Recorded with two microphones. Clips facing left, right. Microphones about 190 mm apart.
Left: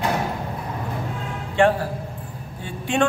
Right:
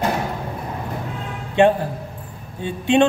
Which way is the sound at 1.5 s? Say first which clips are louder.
Right 3 dB; 20° right (ahead or behind).